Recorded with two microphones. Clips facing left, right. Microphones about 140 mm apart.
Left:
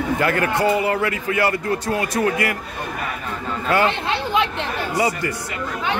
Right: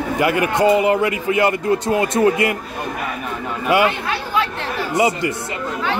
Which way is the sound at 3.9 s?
25° left (ahead or behind).